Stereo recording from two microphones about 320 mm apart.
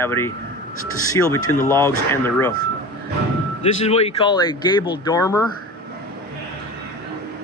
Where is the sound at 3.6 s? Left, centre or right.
Centre.